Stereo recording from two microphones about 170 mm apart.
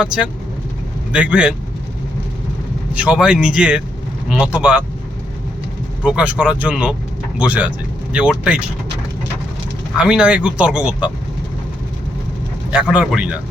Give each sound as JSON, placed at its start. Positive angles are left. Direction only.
{"t": 0.0, "sound": "speech", "side_deg": -5}
{"t": 2.9, "sound": "speech", "side_deg": -5}
{"t": 6.0, "sound": "speech", "side_deg": -5}
{"t": 10.0, "sound": "speech", "side_deg": -5}
{"t": 12.7, "sound": "speech", "side_deg": -5}